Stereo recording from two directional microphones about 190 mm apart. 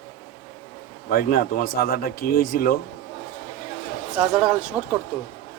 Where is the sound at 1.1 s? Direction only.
50° left (ahead or behind).